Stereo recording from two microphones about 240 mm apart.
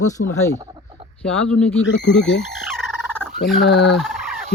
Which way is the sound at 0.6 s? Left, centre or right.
Centre.